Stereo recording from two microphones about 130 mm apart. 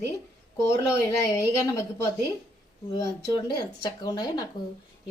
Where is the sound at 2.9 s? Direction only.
30° left (ahead or behind).